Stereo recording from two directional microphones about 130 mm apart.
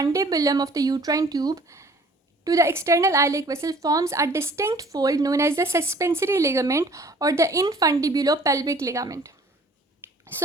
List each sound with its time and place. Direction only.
0.0 s a woman's voice: 25° right (ahead or behind)